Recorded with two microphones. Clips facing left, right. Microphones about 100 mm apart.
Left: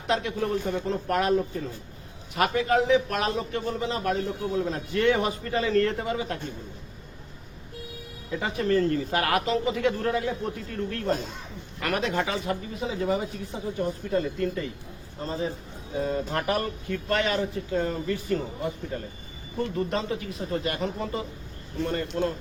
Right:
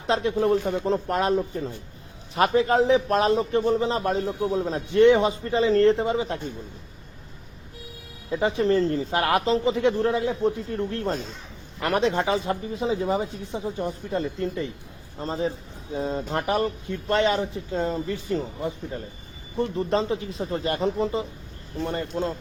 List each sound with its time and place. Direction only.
0.1 s a man's voice: 30° right (ahead or behind)
8.3 s a man's voice: 25° right (ahead or behind)